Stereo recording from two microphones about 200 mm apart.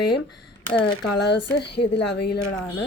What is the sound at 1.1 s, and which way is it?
A woman's voice, 55° left (ahead or behind).